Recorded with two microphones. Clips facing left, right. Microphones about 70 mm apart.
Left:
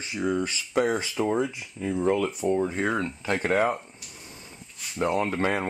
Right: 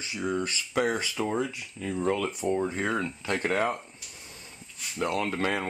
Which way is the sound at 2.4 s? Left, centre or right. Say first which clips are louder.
Left 1 dB; centre.